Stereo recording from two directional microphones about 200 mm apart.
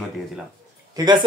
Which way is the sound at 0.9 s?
20° right (ahead or behind).